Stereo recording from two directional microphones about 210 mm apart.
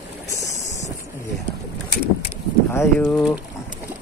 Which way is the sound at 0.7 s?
35° left (ahead or behind).